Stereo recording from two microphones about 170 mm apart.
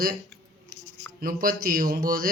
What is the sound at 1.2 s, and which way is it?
Speech, 55° right (ahead or behind).